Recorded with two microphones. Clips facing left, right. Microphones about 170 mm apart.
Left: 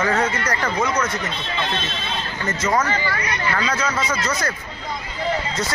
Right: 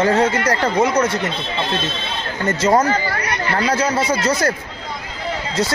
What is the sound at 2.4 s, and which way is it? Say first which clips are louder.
Speech: right 6 dB; 35° right (ahead or behind).